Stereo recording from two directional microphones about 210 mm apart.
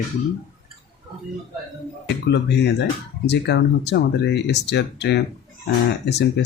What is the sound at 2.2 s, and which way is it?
Speech, 55° left (ahead or behind).